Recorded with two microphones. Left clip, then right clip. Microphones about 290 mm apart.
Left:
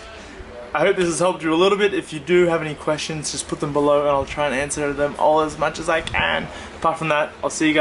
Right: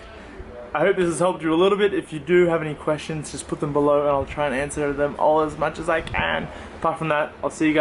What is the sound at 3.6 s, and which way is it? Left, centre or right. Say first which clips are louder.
Speech: left 2 dB; right.